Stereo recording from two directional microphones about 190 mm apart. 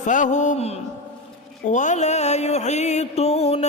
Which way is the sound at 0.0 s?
40° left (ahead or behind).